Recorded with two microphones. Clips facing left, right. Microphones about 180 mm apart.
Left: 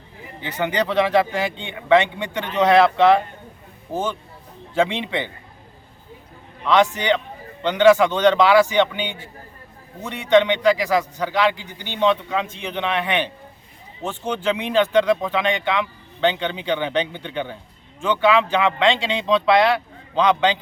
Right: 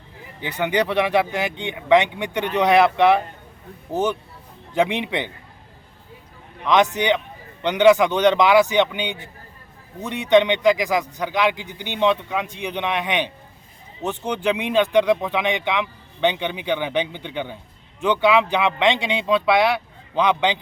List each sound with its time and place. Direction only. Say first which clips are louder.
0.4 s speech: right 1 dB; 15° right (ahead or behind)
6.7 s speech: even; 15° right (ahead or behind)